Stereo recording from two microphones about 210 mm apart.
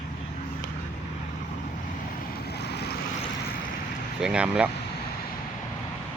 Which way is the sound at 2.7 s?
50° left (ahead or behind).